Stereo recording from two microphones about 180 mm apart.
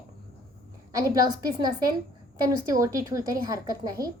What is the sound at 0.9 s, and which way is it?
A woman's voice, 20° right (ahead or behind).